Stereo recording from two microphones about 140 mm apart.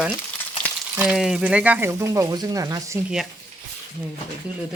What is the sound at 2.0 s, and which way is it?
Speech, 25° right (ahead or behind).